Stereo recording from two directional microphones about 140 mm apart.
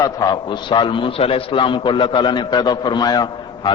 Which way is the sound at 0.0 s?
30° left (ahead or behind).